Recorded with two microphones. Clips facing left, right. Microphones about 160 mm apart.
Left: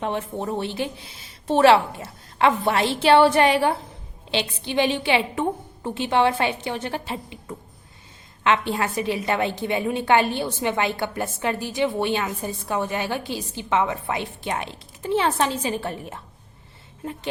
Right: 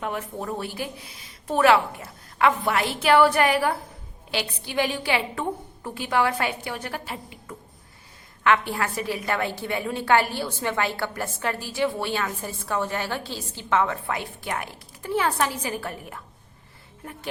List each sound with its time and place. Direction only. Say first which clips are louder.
0.0 s a woman's voice: left 4 dB; 30° left (ahead or behind)